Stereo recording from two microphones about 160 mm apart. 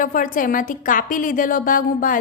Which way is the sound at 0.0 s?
60° left (ahead or behind).